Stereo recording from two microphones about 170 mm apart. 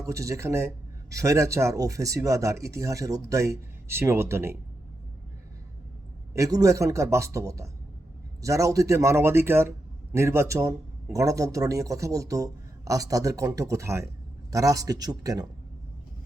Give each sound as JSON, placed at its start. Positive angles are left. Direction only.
{"t": 0.0, "sound": "speech", "side_deg": -20}
{"t": 6.3, "sound": "a man's voice", "side_deg": -20}